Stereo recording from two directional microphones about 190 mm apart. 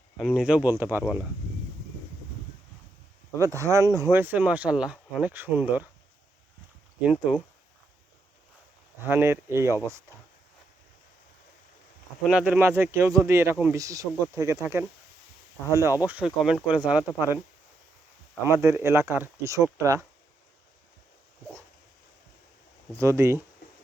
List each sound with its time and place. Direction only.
0.2 s speech: 5° right (ahead or behind)
3.3 s speech: 15° right (ahead or behind)
7.0 s speech: 5° right (ahead or behind)
9.0 s speech: 10° right (ahead or behind)
12.2 s speech: 5° right (ahead or behind)
18.4 s speech: 15° right (ahead or behind)
23.0 s speech: 15° right (ahead or behind)